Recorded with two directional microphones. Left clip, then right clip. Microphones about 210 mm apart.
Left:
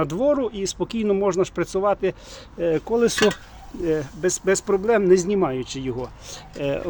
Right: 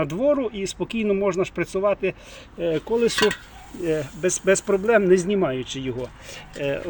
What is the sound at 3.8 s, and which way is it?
Speech, centre (ahead or behind).